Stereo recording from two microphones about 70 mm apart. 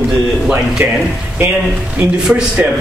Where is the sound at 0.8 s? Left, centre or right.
Right.